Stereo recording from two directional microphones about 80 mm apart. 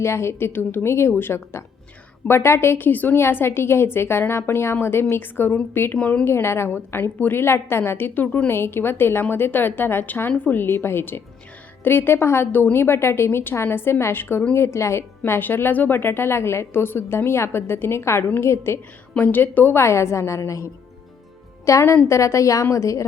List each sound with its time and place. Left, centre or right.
0.0 s a woman's voice: left
6.0 s a woman's voice: centre
6.2 s a woman's voice: left
15.2 s a woman's voice: left
19.2 s a woman's voice: left
21.7 s a woman's voice: left